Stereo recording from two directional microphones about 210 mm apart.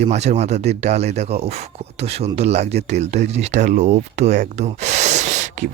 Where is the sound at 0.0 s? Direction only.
30° right (ahead or behind).